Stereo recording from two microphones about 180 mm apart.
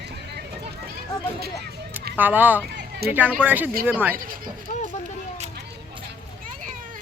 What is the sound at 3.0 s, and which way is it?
Speech, 60° right (ahead or behind).